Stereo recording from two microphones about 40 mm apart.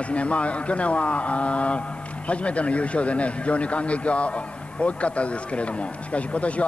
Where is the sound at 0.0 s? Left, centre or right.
Left.